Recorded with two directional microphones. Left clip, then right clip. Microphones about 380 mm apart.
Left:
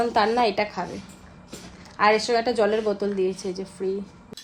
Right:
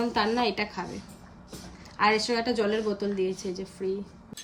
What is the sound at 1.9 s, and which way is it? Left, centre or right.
A woman's voice, centre.